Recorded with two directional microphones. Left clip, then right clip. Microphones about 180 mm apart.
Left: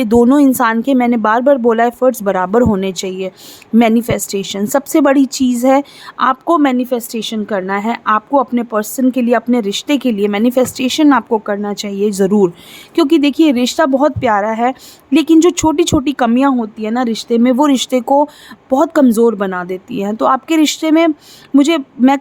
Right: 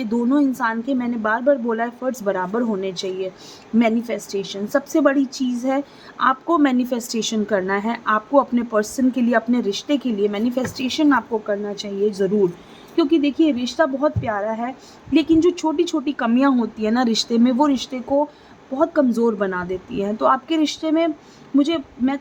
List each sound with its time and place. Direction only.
0.0 s a woman's voice: 45° left (ahead or behind)
18.7 s speech: 55° left (ahead or behind)
19.2 s a woman's voice: 30° left (ahead or behind); by 22.2 s 55° left (ahead or behind)